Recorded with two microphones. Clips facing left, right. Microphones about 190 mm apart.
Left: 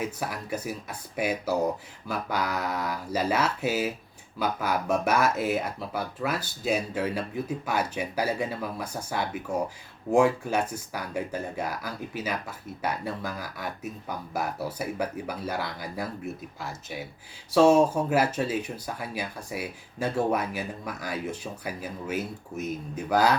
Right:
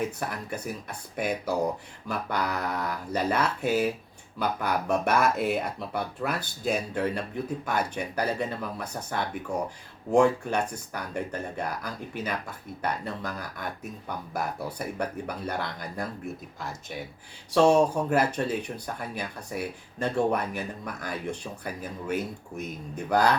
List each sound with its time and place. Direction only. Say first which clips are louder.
0.0 s speech: right 1 dB; 5° left (ahead or behind)
17.5 s speech: left 1 dB; 5° left (ahead or behind)